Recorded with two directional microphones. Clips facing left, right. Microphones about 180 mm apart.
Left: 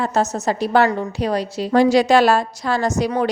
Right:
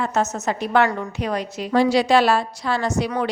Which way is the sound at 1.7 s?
45° left (ahead or behind).